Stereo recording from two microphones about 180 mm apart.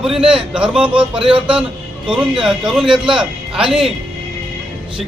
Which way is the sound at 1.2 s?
30° right (ahead or behind).